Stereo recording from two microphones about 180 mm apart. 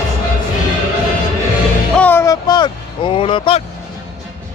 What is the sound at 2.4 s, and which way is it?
Vehicle, 25° left (ahead or behind).